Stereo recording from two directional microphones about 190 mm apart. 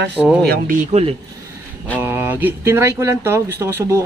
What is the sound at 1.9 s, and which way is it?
Speech, 10° right (ahead or behind).